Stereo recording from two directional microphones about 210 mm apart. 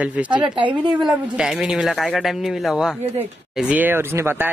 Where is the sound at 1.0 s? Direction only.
Centre (ahead or behind).